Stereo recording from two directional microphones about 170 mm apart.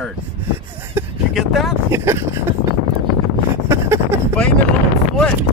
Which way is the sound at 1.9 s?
15° right (ahead or behind).